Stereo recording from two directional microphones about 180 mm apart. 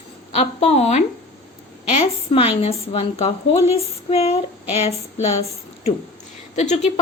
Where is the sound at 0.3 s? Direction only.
35° left (ahead or behind).